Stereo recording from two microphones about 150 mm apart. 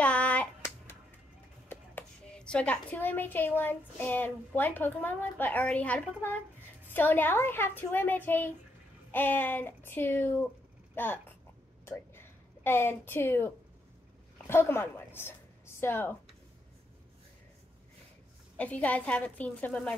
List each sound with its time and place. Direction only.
0.0 s hands: 10° left (ahead or behind)
1.7 s a woman's voice: 10° left (ahead or behind)
11.8 s a sound: 15° left (ahead or behind)
14.5 s a woman's voice: 15° left (ahead or behind)
18.6 s a woman's voice: 10° left (ahead or behind)